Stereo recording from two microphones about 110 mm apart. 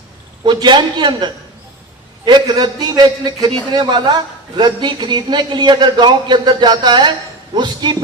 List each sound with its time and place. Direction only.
0.4 s a woman's voice: 45° right (ahead or behind)